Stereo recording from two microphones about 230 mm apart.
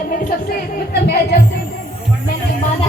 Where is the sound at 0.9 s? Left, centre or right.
Left.